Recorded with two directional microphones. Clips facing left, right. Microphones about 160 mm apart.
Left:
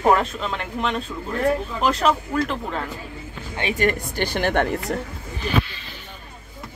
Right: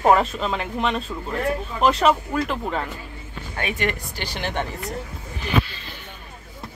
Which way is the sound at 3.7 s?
50° left (ahead or behind).